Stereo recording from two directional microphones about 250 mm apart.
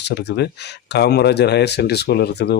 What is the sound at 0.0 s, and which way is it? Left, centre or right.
Speech, left.